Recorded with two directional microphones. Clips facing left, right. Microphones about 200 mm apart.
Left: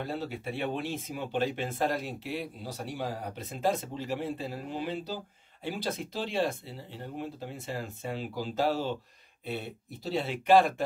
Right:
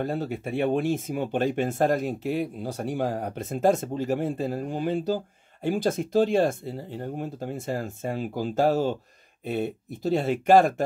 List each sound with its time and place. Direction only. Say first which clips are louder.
0.0 s speech: right 6 dB; 45° right (ahead or behind)